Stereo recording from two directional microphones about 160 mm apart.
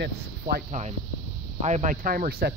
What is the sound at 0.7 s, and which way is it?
Speech, 45° right (ahead or behind).